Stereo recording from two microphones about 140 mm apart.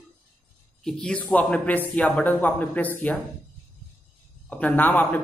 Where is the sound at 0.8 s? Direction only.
5° left (ahead or behind).